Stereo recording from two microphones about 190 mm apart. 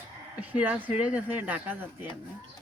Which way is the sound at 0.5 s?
10° right (ahead or behind).